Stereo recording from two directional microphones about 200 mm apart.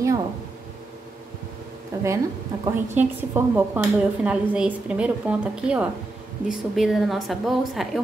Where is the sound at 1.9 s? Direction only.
15° right (ahead or behind).